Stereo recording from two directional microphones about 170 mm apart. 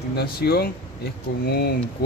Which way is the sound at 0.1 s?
65° left (ahead or behind).